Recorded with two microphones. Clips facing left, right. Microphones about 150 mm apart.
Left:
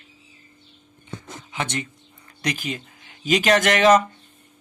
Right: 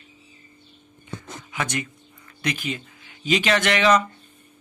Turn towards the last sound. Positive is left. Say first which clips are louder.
# left 3 dB
turn(degrees=45)  # may be behind; listen again after turning